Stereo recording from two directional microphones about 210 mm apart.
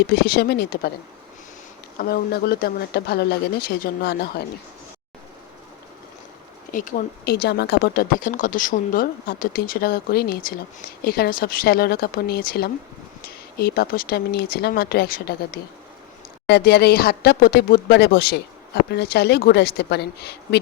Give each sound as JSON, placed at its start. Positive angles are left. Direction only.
{"t": 0.1, "sound": "speech", "side_deg": 50}
{"t": 2.0, "sound": "speech", "side_deg": 45}
{"t": 6.7, "sound": "speech", "side_deg": 40}